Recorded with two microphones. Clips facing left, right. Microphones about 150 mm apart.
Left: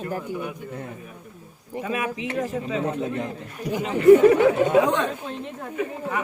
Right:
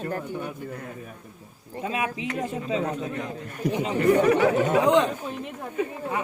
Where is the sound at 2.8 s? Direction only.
30° left (ahead or behind).